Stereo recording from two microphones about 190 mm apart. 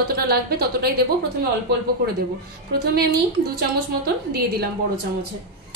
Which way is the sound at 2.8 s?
55° right (ahead or behind).